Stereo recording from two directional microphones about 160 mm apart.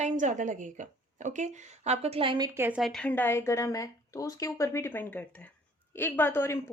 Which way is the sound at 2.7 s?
Centre (ahead or behind).